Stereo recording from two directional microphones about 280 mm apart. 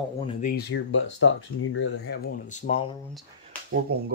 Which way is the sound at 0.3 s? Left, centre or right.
Left.